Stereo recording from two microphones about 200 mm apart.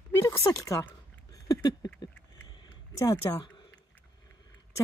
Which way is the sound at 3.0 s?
25° left (ahead or behind).